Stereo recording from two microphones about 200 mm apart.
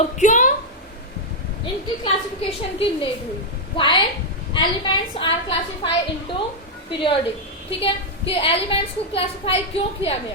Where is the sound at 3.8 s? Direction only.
25° left (ahead or behind).